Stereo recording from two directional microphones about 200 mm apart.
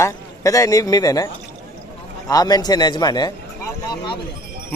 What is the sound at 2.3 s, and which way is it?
A man's voice, 20° left (ahead or behind).